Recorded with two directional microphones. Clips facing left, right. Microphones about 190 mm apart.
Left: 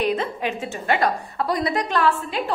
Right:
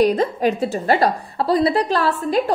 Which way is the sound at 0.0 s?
40° right (ahead or behind).